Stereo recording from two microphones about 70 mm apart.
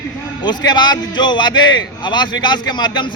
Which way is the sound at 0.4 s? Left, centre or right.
Left.